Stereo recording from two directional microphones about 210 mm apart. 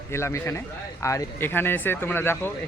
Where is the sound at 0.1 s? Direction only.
15° left (ahead or behind).